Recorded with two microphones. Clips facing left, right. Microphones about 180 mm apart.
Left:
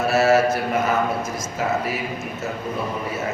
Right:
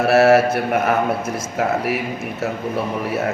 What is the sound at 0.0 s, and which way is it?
A man's voice, 60° right (ahead or behind).